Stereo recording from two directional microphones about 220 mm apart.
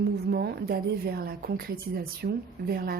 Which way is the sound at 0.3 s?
45° right (ahead or behind).